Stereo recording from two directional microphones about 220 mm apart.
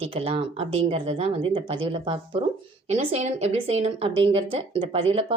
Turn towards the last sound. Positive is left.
turn(degrees=-25)  # may be behind; listen again after turning